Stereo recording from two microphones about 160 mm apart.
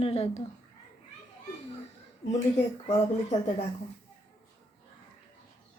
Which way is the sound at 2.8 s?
40° left (ahead or behind).